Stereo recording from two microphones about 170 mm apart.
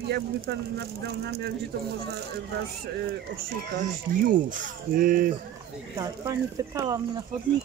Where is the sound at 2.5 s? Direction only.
70° right (ahead or behind).